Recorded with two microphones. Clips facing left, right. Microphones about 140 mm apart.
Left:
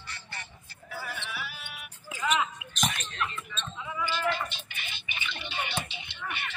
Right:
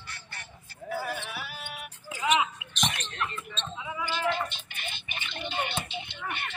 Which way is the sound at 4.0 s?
50° right (ahead or behind).